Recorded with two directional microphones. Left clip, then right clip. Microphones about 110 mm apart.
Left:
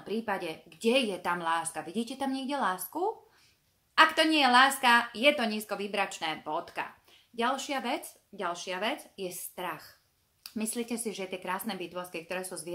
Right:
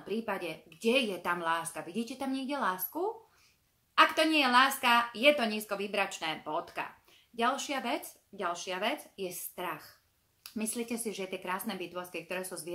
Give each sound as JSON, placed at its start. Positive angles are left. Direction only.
{"t": 0.0, "sound": "a woman's voice", "side_deg": 25}